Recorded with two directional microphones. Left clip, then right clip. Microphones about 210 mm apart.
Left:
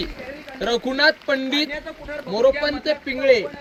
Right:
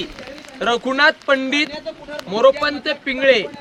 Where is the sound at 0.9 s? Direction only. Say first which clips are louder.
Right 4 dB; 45° left (ahead or behind).